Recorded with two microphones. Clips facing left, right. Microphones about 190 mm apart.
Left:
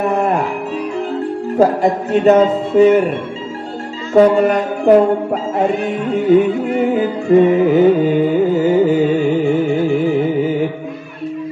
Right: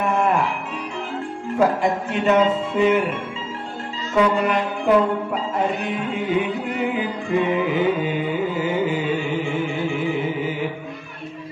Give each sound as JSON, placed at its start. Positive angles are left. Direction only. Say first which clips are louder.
{"t": 0.0, "sound": "music", "louder": "left 4 dB", "side_deg": 40}
{"t": 1.6, "sound": "a man's voice", "louder": "left 6 dB", "side_deg": 40}
{"t": 4.1, "sound": "music", "louder": "left 8 dB", "side_deg": 40}